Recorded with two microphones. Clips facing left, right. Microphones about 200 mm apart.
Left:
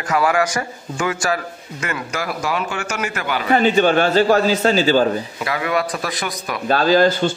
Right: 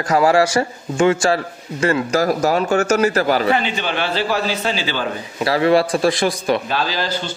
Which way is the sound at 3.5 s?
45° left (ahead or behind).